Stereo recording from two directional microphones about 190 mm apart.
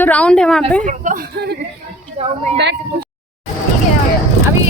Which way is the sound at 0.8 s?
40° right (ahead or behind).